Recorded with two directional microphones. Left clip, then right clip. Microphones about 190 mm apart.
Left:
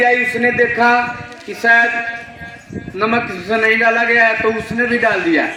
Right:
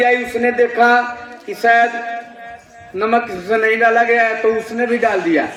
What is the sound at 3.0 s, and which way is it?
A man's voice, 45° left (ahead or behind).